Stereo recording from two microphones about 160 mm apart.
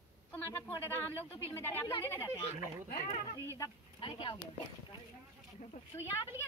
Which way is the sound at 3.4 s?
20° left (ahead or behind).